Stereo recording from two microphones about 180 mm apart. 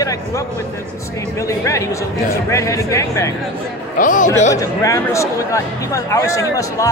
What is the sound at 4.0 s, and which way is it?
Speech, 45° left (ahead or behind).